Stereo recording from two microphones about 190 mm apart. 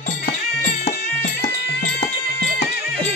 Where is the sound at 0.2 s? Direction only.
50° left (ahead or behind).